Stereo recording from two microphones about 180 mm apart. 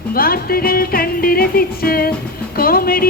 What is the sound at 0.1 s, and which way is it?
Music, 55° left (ahead or behind).